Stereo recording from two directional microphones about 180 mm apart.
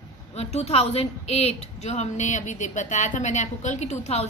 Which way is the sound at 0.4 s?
35° left (ahead or behind).